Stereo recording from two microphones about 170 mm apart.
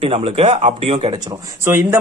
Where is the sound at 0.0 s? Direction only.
35° right (ahead or behind).